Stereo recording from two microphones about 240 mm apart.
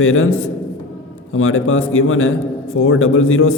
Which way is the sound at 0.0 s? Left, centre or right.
Left.